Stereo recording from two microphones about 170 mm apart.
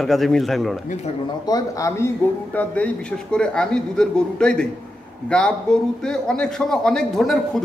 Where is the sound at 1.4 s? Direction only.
20° left (ahead or behind).